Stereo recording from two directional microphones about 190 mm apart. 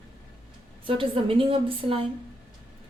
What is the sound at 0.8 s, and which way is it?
A woman's voice, 30° right (ahead or behind).